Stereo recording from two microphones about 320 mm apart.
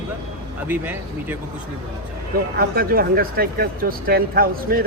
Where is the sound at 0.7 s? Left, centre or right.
Centre.